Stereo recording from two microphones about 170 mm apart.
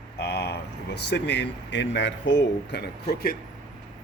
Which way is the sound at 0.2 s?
75° left (ahead or behind).